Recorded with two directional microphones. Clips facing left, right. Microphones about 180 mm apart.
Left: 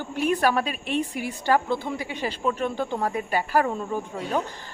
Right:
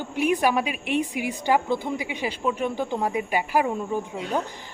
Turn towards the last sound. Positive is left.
turn(degrees=-10)  # may be behind; listen again after turning